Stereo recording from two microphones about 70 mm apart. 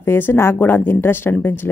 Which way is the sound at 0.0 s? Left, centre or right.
Left.